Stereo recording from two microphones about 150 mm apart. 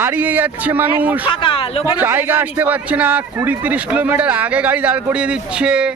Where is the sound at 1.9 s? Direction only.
15° right (ahead or behind).